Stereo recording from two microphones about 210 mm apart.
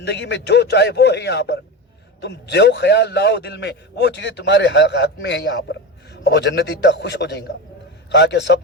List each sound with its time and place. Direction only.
0.0 s a man's voice: 55° left (ahead or behind)